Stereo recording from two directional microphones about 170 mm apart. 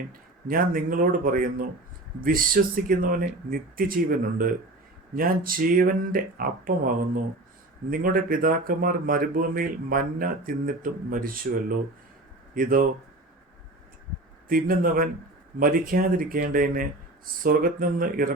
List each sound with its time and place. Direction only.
0.1 s speech: 55° right (ahead or behind)
14.4 s speech: 55° right (ahead or behind)